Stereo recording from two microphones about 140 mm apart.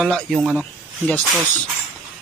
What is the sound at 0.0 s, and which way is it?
Speech, centre (ahead or behind).